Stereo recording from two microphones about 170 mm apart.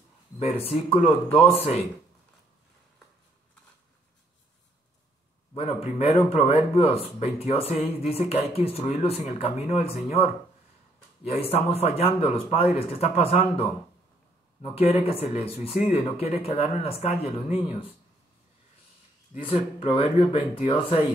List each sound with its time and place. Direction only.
0.4 s speech: 35° left (ahead or behind)
5.5 s speech: 35° left (ahead or behind)
11.2 s speech: 35° left (ahead or behind)
19.3 s speech: 35° left (ahead or behind)